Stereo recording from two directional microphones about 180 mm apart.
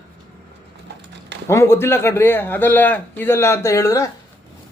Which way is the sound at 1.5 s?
15° left (ahead or behind).